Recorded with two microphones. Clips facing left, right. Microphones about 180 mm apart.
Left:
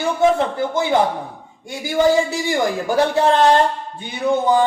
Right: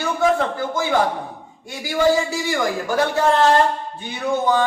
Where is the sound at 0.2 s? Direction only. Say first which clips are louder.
Left 2 dB; 20° left (ahead or behind).